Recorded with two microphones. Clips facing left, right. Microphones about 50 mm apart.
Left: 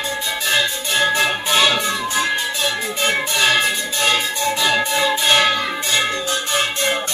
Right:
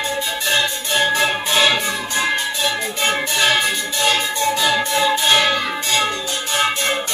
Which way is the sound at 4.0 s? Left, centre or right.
Centre.